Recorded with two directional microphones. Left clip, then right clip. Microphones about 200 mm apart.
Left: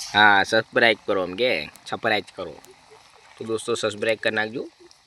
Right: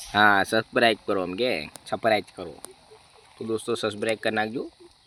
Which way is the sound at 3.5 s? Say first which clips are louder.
Left 2 dB; centre (ahead or behind).